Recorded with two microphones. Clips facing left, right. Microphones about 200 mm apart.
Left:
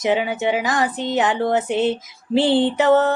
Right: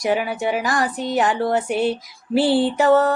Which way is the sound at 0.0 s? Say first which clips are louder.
Left 1 dB; 20° left (ahead or behind).